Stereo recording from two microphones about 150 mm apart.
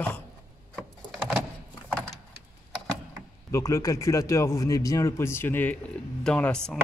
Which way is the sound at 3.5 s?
20° left (ahead or behind).